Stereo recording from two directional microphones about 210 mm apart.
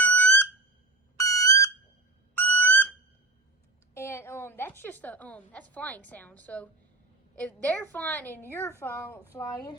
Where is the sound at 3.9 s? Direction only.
10° left (ahead or behind).